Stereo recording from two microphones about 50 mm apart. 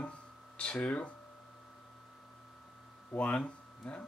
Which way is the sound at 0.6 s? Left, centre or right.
Left.